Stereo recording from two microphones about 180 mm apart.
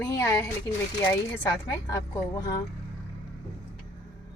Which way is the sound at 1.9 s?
20° left (ahead or behind).